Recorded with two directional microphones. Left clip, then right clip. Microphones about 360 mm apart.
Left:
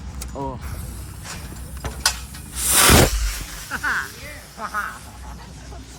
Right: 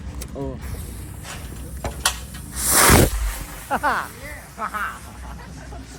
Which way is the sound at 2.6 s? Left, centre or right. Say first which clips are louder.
Left 1 dB; centre.